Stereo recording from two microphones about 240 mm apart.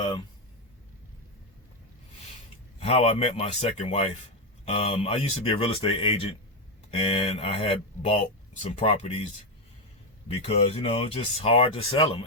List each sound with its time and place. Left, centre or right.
2.8 s speech: left
10.4 s speech: left